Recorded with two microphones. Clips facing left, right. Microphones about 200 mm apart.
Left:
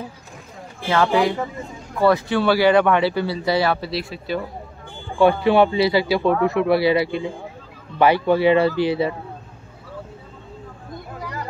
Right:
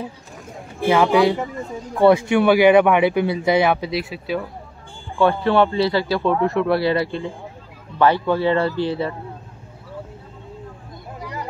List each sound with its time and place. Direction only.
0.8 s speech: 10° right (ahead or behind)
3.9 s speech: 5° right (ahead or behind)
5.2 s speech: 10° left (ahead or behind)